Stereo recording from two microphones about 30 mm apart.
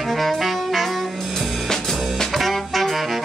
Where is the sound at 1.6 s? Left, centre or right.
Centre.